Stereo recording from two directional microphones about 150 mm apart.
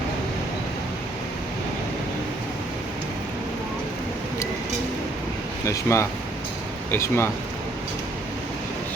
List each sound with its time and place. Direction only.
5.6 s speech: 20° left (ahead or behind)